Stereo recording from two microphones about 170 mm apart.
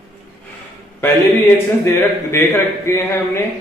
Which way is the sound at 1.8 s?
15° left (ahead or behind).